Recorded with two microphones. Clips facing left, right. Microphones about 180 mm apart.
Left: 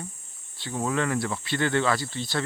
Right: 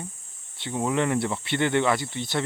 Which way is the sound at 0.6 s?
20° right (ahead or behind).